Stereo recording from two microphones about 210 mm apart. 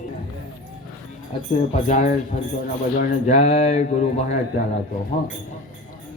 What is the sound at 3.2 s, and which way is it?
Mantra, 30° left (ahead or behind).